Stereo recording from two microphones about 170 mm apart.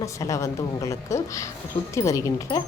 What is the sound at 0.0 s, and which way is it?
A woman's voice, 20° left (ahead or behind).